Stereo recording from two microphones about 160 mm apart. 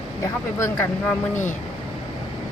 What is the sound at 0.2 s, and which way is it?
Speech, 20° left (ahead or behind).